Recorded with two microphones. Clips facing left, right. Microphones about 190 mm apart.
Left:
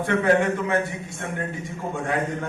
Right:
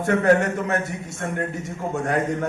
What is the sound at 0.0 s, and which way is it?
Speech, 45° right (ahead or behind).